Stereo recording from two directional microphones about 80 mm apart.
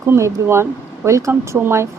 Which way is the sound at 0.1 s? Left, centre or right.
Right.